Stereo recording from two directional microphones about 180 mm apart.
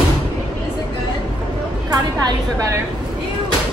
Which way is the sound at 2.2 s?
20° right (ahead or behind).